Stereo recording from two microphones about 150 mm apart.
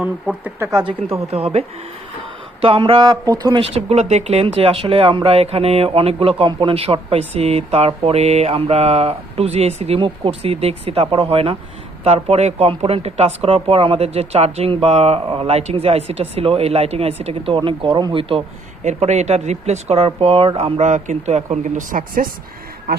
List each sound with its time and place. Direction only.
0.0 s speech: 10° right (ahead or behind)
0.7 s speech: 25° right (ahead or behind)
1.3 s speech: 40° right (ahead or behind); by 3.6 s 25° right (ahead or behind)
3.6 s speech: 40° right (ahead or behind)
18.9 s speech: 50° right (ahead or behind); by 22.3 s 65° right (ahead or behind)